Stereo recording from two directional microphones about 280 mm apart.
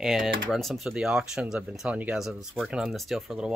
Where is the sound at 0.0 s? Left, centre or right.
Centre.